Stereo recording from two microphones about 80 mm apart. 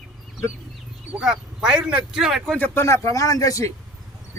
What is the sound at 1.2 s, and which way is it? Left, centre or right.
Speech, centre.